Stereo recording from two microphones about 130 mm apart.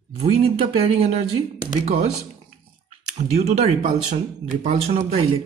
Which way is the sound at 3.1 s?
55° right (ahead or behind).